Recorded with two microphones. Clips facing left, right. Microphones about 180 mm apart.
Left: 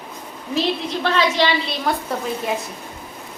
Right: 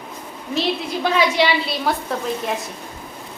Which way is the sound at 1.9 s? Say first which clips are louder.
Even; centre (ahead or behind).